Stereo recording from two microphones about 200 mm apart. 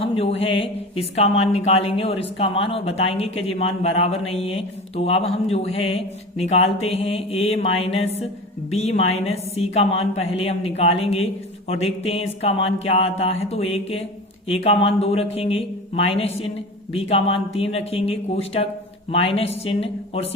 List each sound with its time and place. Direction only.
0.0 s a woman's voice: 30° left (ahead or behind)